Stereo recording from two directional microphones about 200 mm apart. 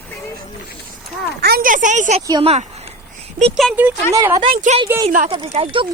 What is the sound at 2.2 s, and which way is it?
Speech, 25° right (ahead or behind).